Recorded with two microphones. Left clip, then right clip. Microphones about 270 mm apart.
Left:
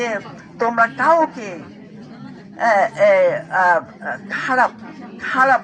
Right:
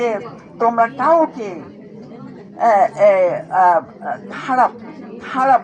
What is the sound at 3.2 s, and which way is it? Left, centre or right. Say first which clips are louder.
Speech: right 2 dB; left.